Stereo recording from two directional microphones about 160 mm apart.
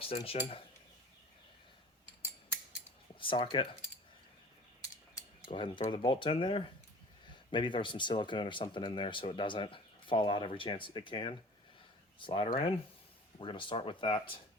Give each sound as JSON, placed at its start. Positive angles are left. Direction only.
{"t": 0.1, "sound": "speech", "side_deg": 35}
{"t": 3.2, "sound": "speech", "side_deg": 30}
{"t": 5.5, "sound": "speech", "side_deg": 30}